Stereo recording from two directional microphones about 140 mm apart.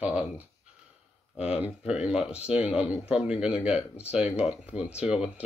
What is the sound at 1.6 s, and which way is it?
Speech, 5° right (ahead or behind).